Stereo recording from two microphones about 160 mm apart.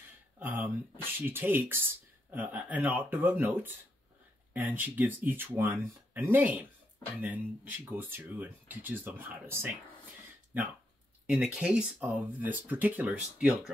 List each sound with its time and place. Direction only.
0.4 s a sound: 10° right (ahead or behind)
1.2 s speech: 15° right (ahead or behind)
11.2 s speech: 5° right (ahead or behind)